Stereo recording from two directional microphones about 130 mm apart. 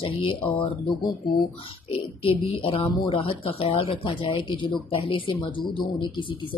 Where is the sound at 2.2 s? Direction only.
45° left (ahead or behind).